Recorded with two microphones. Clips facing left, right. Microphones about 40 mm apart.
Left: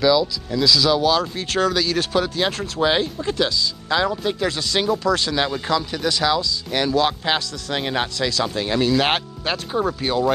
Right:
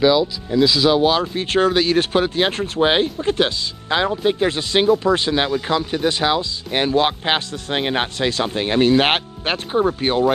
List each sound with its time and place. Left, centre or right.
0.0 s speech: right